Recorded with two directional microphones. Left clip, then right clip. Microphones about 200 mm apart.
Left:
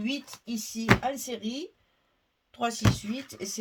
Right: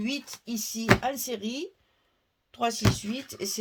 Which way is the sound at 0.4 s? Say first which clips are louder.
Right 1 dB; 40° right (ahead or behind).